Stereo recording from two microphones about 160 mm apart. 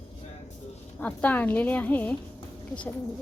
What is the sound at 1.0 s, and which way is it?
A woman's voice, 10° left (ahead or behind).